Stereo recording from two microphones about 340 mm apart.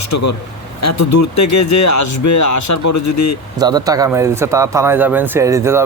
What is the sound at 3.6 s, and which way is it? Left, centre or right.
Speech, centre.